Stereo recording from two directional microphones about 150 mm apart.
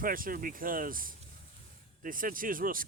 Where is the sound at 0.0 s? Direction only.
70° right (ahead or behind).